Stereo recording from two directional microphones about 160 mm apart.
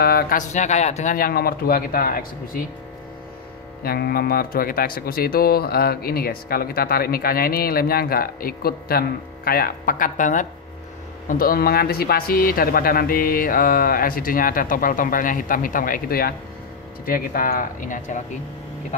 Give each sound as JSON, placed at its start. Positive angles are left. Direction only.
{"t": 0.0, "sound": "speech", "side_deg": 70}
{"t": 1.1, "sound": "speech", "side_deg": 70}
{"t": 3.8, "sound": "speech", "side_deg": 70}
{"t": 11.2, "sound": "speech", "side_deg": 65}